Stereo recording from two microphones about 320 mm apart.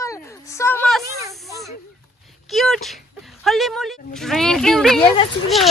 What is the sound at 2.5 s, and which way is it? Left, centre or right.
Speech, centre.